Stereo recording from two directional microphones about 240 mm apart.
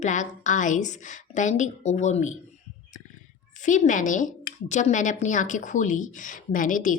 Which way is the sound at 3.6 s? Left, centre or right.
Left.